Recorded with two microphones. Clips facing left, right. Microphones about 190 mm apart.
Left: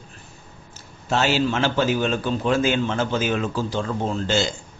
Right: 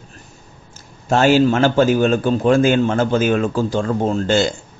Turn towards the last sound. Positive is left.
turn(degrees=-55)  # may be behind; listen again after turning